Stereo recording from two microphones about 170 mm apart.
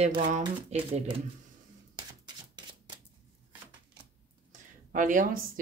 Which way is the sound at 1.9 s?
25° right (ahead or behind).